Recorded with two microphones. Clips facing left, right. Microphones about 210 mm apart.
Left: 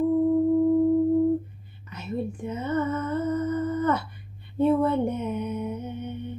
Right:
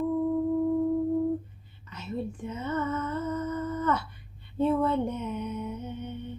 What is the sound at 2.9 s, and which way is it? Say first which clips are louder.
Music: left 4 dB; 55° left (ahead or behind).